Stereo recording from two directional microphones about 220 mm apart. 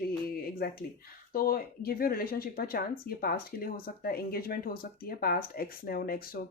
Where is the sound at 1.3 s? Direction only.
40° left (ahead or behind).